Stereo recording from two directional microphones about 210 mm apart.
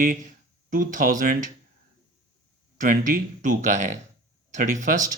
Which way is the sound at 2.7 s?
40° right (ahead or behind).